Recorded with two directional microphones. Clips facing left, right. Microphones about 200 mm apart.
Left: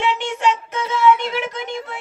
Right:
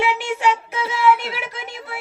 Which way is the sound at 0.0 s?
10° right (ahead or behind).